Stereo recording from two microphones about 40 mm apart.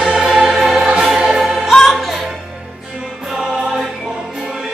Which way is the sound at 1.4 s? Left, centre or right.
Centre.